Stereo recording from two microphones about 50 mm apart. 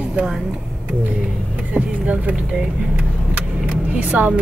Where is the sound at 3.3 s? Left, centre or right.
Right.